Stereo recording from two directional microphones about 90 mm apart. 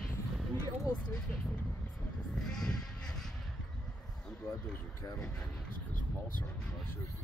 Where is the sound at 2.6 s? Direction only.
10° left (ahead or behind).